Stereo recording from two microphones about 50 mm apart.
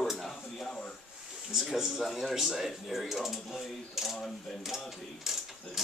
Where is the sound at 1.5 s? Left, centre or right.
Centre.